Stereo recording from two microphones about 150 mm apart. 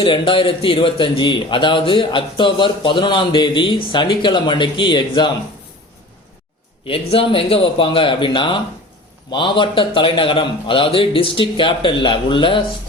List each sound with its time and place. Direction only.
0.0 s a man's voice: 35° left (ahead or behind)
6.8 s a man's voice: 40° left (ahead or behind)